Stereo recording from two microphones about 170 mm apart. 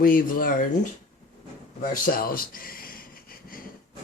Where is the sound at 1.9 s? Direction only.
60° left (ahead or behind).